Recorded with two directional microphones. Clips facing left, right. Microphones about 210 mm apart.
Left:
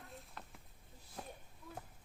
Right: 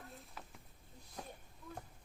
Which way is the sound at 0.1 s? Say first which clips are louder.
Even; centre (ahead or behind).